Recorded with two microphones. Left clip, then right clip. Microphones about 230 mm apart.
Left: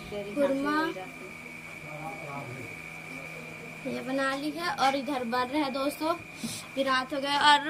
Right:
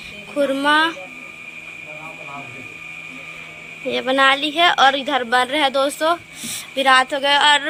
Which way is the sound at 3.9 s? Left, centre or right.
Right.